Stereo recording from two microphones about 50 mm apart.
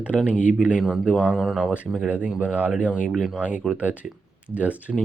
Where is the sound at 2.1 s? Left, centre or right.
Right.